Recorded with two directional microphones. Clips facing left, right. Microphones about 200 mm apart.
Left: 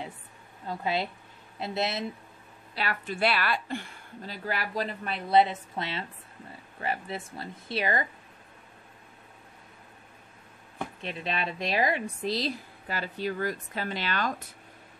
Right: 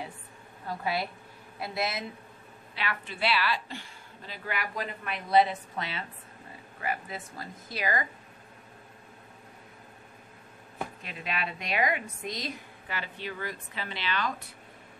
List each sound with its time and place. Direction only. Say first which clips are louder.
0.7 s a woman's voice: left 2 dB; 20° left (ahead or behind)
2.7 s a woman's voice: left 3 dB; 40° left (ahead or behind)
4.5 s a woman's voice: left 3 dB; 35° left (ahead or behind)
11.1 s a woman's voice: left 5 dB; 30° left (ahead or behind)